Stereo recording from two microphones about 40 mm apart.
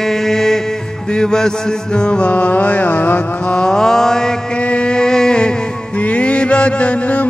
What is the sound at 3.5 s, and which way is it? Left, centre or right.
Mantra, left.